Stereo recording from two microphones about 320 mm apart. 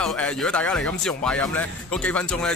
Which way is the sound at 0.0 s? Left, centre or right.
Centre.